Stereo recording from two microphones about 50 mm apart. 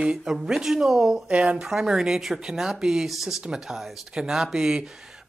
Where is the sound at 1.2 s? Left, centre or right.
Right.